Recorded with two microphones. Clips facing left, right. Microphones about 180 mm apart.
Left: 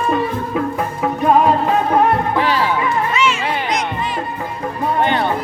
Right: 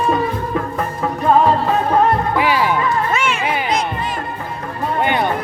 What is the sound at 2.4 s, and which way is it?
Music, 10° right (ahead or behind).